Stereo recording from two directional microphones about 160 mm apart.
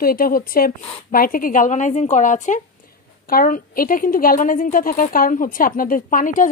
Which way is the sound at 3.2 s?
65° left (ahead or behind).